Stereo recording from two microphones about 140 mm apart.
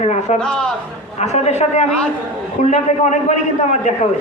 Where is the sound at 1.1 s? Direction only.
50° left (ahead or behind).